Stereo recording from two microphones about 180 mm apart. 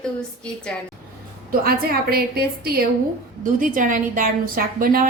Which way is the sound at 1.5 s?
55° right (ahead or behind).